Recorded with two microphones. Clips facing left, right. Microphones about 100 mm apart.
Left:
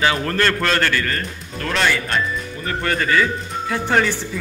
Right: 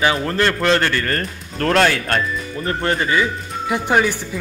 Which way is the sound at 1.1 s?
45° right (ahead or behind).